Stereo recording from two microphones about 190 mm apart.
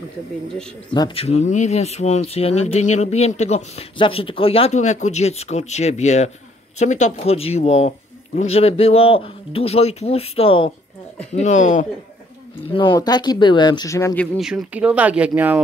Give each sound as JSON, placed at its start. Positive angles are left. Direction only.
{"t": 0.9, "sound": "speech", "side_deg": 25}
{"t": 12.7, "sound": "speech", "side_deg": 25}
{"t": 14.2, "sound": "speech", "side_deg": 0}